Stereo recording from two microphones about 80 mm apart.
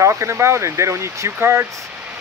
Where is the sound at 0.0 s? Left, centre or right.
Right.